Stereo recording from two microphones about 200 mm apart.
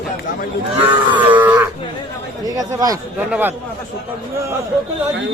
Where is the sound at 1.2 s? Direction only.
10° right (ahead or behind).